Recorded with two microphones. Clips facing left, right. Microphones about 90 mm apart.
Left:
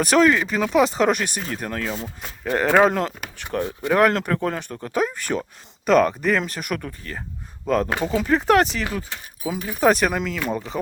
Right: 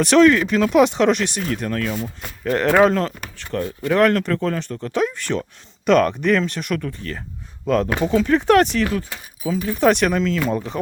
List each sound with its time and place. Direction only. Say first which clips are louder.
0.0 s speech: right 4 dB; 5° left (ahead or behind); by 2.0 s 30° left (ahead or behind)
2.4 s speech: right 2 dB; 10° left (ahead or behind)
3.3 s speech: left 1 dB; 20° left (ahead or behind)